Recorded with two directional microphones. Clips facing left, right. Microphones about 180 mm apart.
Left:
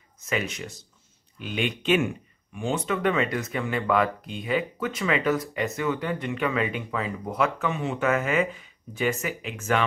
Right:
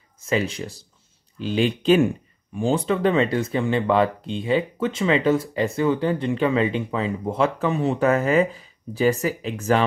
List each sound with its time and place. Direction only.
0.2 s speech: 30° right (ahead or behind)